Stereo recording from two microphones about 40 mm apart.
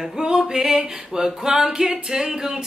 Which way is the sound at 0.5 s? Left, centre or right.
Centre.